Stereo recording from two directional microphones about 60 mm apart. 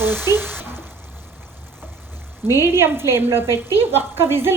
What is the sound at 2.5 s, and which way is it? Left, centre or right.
Stir, right.